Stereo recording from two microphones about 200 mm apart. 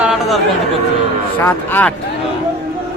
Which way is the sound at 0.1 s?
Centre (ahead or behind).